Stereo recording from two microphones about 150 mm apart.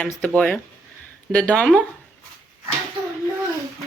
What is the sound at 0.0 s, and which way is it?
A woman's voice, 10° left (ahead or behind).